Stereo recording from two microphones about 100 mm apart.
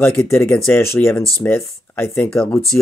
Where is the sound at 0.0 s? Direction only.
25° left (ahead or behind).